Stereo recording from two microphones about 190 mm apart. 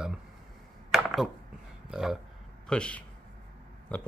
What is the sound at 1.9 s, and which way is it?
A man's voice, 5° right (ahead or behind).